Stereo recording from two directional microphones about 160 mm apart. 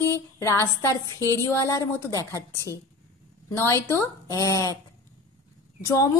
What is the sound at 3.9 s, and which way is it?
Speech, 20° left (ahead or behind).